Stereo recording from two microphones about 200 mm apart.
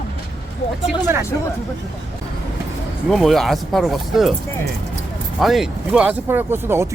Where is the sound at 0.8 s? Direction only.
10° right (ahead or behind).